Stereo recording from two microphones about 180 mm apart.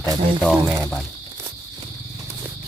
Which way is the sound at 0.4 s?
5° left (ahead or behind).